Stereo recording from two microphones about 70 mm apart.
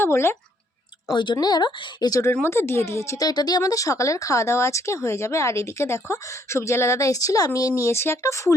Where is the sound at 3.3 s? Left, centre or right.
Left.